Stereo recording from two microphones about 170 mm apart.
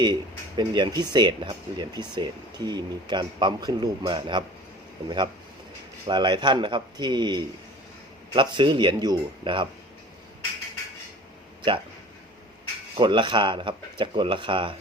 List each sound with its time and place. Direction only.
0.0 s speech: 25° right (ahead or behind)
13.0 s speech: 30° right (ahead or behind)